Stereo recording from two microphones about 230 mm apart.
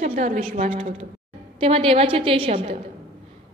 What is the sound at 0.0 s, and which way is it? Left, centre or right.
A woman's voice, right.